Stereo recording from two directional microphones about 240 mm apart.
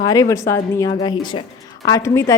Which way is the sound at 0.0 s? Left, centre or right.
Centre.